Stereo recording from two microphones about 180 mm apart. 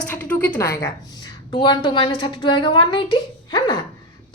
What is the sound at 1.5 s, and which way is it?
A woman's voice, 25° left (ahead or behind).